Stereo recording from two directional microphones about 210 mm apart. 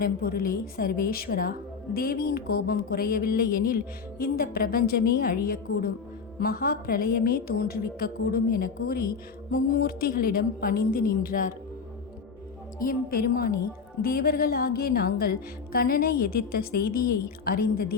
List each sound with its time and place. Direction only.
0.0 s speech: 45° left (ahead or behind)
12.8 s speech: 45° left (ahead or behind)